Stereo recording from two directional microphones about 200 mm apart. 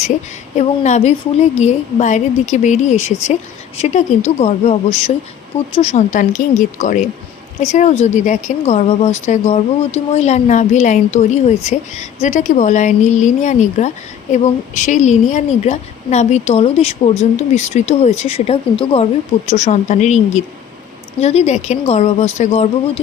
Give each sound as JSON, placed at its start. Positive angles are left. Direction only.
{"t": 0.5, "sound": "speech", "side_deg": 35}